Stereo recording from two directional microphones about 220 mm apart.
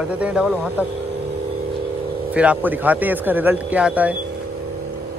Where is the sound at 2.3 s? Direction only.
5° right (ahead or behind).